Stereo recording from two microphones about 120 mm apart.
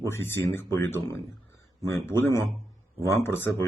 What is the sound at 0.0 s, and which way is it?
Speech, 20° left (ahead or behind).